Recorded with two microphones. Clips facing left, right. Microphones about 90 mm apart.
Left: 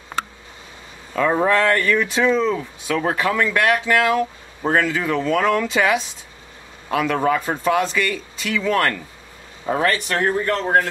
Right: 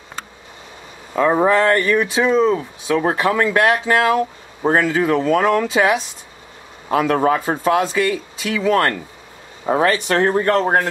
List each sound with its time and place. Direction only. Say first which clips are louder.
1.1 s speech: right 3 dB; 20° right (ahead or behind)
10.3 s speech: right 3 dB; 45° right (ahead or behind)